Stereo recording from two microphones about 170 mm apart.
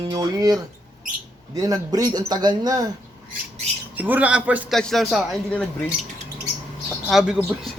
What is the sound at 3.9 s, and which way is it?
A man's voice, 10° right (ahead or behind).